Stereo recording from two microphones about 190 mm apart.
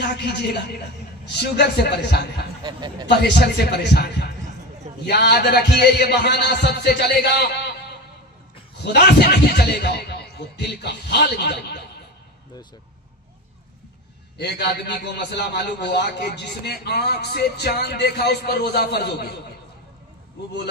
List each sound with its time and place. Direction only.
0.0 s a man's voice: 60° left (ahead or behind)
2.6 s a man's voice: 20° right (ahead or behind)
3.1 s a man's voice: 60° left (ahead or behind)
8.8 s a man's voice: 60° left (ahead or behind)
14.4 s a man's voice: 60° left (ahead or behind)